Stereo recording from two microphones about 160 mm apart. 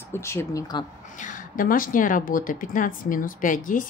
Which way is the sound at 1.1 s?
55° left (ahead or behind).